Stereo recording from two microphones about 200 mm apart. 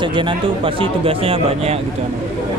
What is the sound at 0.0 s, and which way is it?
Speech, 25° right (ahead or behind).